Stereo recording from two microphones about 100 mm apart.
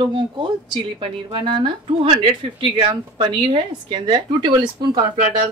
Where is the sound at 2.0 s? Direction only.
80° right.